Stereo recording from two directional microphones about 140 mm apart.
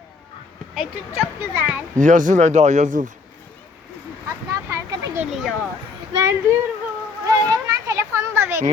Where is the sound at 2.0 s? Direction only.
65° right (ahead or behind).